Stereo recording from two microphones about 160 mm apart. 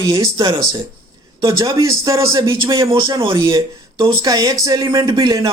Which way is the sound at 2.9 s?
30° right (ahead or behind).